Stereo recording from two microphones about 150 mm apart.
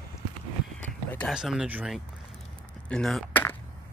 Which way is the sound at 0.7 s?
10° left (ahead or behind).